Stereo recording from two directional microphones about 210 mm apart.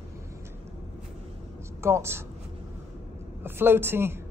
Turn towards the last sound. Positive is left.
turn(degrees=-10)  # may be behind; listen again after turning